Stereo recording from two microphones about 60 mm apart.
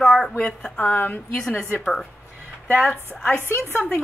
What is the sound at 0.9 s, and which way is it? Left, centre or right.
Speech, left.